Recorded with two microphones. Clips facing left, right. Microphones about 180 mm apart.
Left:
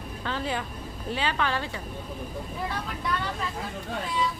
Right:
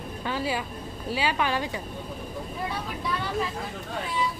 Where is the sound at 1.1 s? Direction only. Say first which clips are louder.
Right 2 dB; 10° right (ahead or behind).